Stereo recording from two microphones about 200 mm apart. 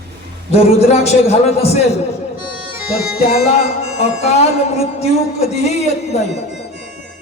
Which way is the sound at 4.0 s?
35° left (ahead or behind).